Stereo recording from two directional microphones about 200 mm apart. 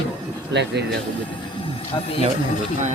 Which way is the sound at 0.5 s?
60° right (ahead or behind).